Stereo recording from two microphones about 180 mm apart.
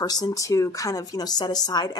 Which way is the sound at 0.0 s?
20° left (ahead or behind).